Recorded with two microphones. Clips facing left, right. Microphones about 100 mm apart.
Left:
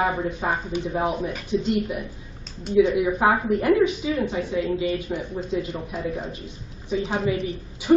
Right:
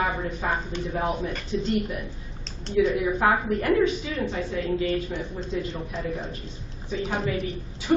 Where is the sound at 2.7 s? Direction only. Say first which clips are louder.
Left 3 dB; 25° left (ahead or behind).